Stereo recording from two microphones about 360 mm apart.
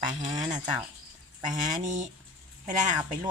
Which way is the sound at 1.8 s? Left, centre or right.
Centre.